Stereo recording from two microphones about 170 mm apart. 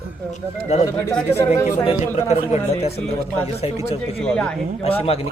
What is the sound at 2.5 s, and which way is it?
Speech, 40° left (ahead or behind).